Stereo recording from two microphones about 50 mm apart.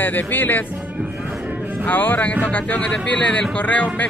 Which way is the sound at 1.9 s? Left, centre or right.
Left.